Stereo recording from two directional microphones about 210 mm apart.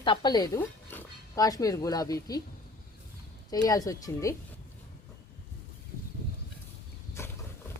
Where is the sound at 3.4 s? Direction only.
20° left (ahead or behind).